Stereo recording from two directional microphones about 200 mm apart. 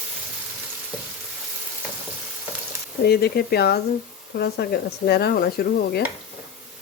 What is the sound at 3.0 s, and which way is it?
Speech, 50° left (ahead or behind).